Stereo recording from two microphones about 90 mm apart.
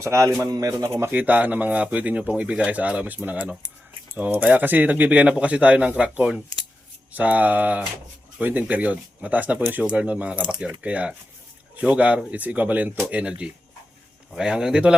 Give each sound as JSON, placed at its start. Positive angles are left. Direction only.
{"t": 0.0, "sound": "a man's voice", "side_deg": -35}
{"t": 0.9, "sound": "speech", "side_deg": -20}